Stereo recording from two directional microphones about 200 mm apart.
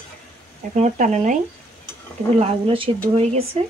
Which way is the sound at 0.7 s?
40° right (ahead or behind).